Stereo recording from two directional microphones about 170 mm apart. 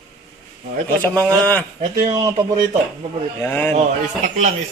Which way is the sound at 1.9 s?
20° right (ahead or behind).